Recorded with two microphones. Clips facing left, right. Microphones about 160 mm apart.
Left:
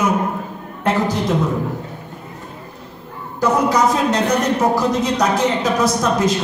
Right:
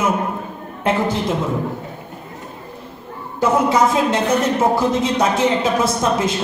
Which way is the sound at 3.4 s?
25° right (ahead or behind).